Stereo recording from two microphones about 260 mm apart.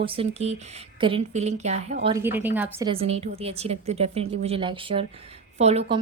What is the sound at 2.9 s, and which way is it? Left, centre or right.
A woman's voice, right.